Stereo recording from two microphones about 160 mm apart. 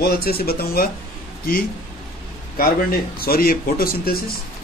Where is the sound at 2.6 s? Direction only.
70° left (ahead or behind).